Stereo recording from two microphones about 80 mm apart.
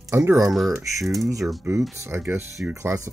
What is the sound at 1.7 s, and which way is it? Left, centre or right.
Speech, right.